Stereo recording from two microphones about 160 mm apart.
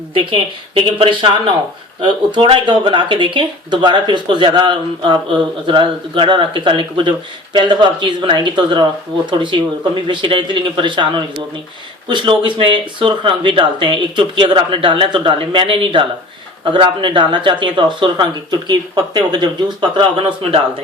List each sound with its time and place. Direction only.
0.1 s speech: 35° right (ahead or behind)